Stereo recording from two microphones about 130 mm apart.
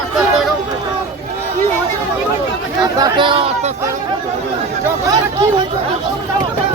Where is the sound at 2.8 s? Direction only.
30° right (ahead or behind).